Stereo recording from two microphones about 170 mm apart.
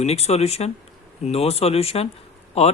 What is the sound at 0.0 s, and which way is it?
Speech, 40° left (ahead or behind).